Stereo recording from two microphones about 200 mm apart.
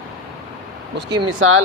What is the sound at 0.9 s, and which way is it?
Speech, 65° right (ahead or behind).